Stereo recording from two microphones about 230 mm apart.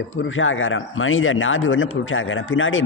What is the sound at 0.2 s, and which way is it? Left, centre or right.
A man's voice, left.